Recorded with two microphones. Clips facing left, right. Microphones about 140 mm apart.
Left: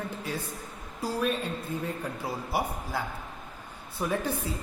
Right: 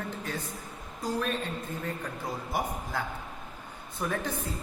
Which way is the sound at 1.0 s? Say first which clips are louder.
Left 2 dB; 10° left (ahead or behind).